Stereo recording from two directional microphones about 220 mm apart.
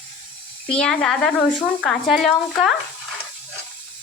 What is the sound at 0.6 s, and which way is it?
Speech, 5° left (ahead or behind).